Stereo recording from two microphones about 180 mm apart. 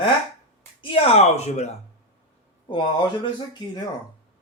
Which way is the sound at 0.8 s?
30° left (ahead or behind).